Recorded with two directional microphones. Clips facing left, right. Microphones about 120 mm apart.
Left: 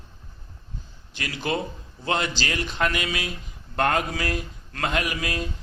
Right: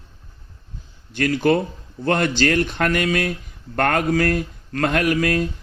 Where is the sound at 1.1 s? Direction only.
50° right (ahead or behind).